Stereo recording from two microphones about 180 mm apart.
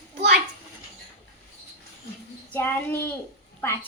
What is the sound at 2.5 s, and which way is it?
Speech, 10° left (ahead or behind).